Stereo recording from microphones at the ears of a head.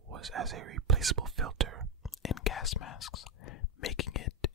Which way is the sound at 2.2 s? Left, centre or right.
Left.